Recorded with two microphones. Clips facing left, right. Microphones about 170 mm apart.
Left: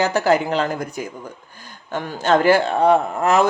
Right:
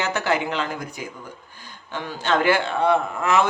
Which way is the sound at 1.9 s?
45° left (ahead or behind).